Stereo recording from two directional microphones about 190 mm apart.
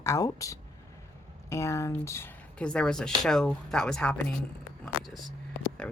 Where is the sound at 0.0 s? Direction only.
15° left (ahead or behind).